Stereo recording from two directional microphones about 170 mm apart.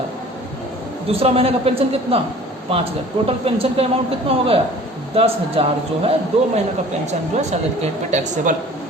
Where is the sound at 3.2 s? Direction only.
35° right (ahead or behind).